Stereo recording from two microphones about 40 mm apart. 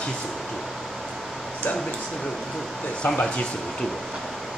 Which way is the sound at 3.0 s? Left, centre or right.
Left.